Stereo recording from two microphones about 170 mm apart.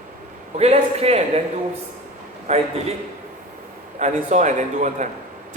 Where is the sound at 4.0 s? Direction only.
45° right (ahead or behind).